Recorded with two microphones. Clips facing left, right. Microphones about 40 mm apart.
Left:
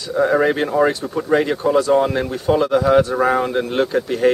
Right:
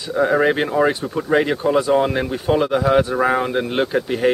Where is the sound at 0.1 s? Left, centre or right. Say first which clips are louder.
Even; centre.